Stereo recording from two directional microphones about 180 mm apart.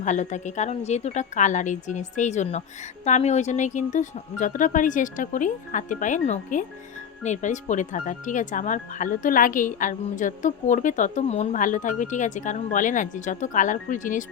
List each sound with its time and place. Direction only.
0.0 s speech: 40° left (ahead or behind)